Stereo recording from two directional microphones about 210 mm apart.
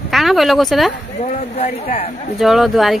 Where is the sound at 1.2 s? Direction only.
30° left (ahead or behind).